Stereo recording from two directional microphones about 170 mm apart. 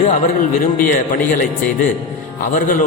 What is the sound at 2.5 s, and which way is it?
Speech, 50° left (ahead or behind).